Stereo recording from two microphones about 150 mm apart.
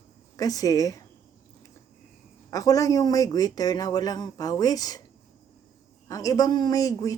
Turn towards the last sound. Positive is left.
turn(degrees=25)  # may be behind; listen again after turning